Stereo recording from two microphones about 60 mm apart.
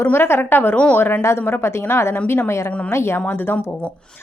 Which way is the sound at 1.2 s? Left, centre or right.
Left.